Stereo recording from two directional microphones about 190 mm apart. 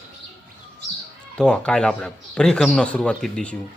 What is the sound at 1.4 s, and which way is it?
A man's voice, 5° left (ahead or behind).